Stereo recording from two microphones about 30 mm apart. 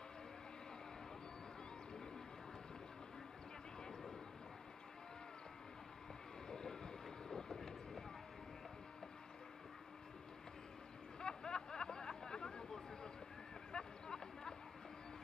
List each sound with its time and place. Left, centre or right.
6.5 s boat: left
11.1 s hubbub: left
13.7 s a sound: left